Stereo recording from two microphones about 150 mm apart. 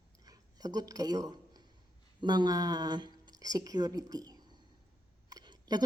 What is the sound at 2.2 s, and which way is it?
A woman's voice, 30° right (ahead or behind).